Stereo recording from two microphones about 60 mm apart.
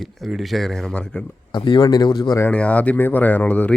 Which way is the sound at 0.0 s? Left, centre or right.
Centre.